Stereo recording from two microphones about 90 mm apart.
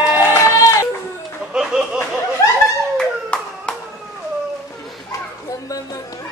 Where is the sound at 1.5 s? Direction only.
10° right (ahead or behind).